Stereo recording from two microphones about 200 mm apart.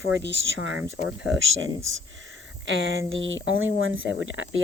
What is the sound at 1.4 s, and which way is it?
Speech, 75° right (ahead or behind).